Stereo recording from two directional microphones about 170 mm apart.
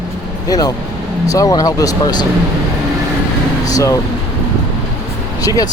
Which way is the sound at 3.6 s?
20° left (ahead or behind).